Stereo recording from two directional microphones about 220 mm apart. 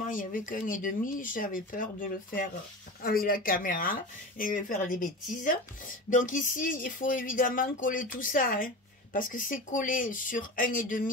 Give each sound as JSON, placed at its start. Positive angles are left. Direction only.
{"t": 0.0, "sound": "speech", "side_deg": 35}